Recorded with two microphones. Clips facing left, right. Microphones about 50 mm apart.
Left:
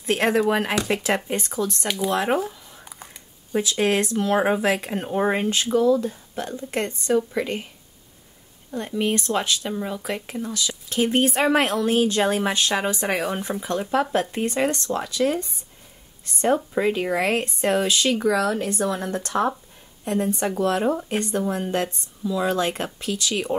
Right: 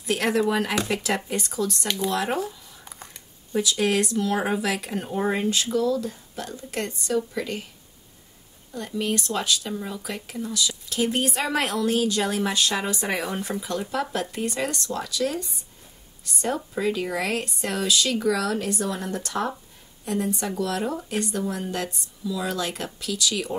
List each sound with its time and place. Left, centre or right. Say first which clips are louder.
0.0 s speech: left 3 dB; left
1.9 s speech: left 4 dB; centre
2.1 s speech: left 3 dB; left
2.8 s a sound: even; centre
3.5 s speech: left 2 dB; left
8.7 s speech: left 3 dB; left
9.8 s speech: left 4 dB; left
10.0 s speech: left 3 dB; left